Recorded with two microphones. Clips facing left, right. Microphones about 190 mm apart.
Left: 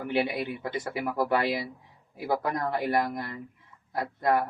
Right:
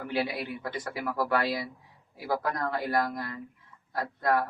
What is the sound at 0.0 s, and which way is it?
A man's voice, 20° left (ahead or behind).